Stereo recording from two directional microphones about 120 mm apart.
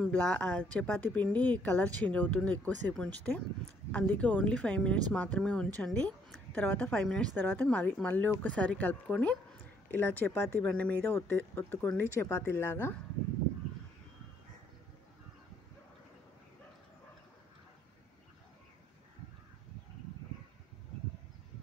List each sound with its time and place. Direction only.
0.0 s speech: 10° left (ahead or behind)